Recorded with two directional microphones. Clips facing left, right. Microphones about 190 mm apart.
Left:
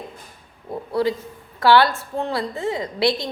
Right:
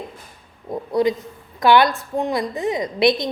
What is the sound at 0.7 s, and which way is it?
A woman's voice, 20° right (ahead or behind).